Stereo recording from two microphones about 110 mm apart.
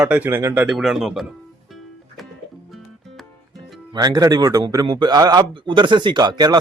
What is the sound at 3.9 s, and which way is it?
A man's voice, 40° right (ahead or behind).